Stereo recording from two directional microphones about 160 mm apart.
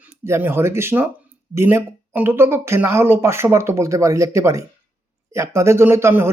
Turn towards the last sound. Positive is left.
turn(degrees=-15)  # may be behind; listen again after turning